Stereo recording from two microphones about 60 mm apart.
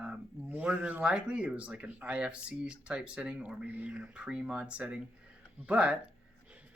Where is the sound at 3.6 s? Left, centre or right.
Right.